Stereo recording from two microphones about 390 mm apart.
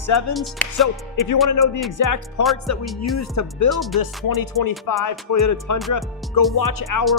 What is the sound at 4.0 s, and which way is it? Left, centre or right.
Music, left.